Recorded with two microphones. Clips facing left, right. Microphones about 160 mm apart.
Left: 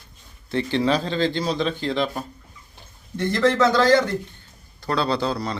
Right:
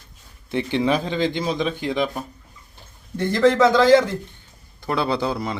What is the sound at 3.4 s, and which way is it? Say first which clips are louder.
A man's voice: right 3 dB; 10° right (ahead or behind).